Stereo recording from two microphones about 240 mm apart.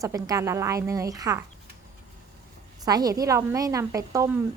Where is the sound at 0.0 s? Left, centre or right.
Centre.